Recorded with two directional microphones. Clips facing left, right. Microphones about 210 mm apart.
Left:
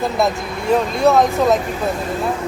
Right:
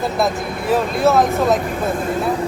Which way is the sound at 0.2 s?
Centre (ahead or behind).